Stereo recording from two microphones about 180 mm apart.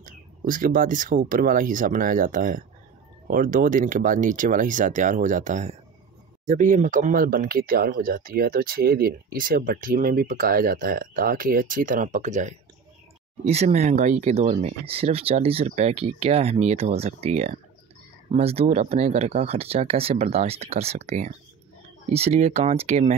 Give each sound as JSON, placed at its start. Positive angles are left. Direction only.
{"t": 0.0, "sound": "speech", "side_deg": -50}